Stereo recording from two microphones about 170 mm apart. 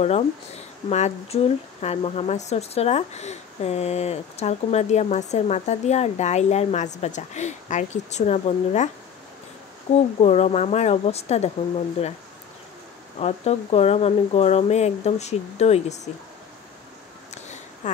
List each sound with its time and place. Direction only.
0.0 s speech: 40° left (ahead or behind)
13.2 s speech: 35° left (ahead or behind)
17.3 s a sound: 45° left (ahead or behind)